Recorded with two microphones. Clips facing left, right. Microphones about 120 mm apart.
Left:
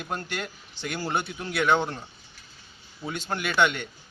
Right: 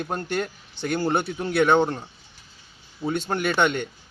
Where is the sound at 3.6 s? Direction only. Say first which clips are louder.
Even; 50° right (ahead or behind).